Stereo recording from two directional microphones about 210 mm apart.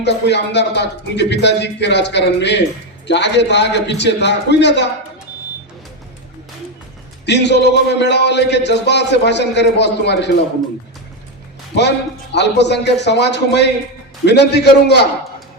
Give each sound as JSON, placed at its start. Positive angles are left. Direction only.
{"t": 0.0, "sound": "speech", "side_deg": 55}
{"t": 7.3, "sound": "speech", "side_deg": 55}
{"t": 11.8, "sound": "a man's voice", "side_deg": 55}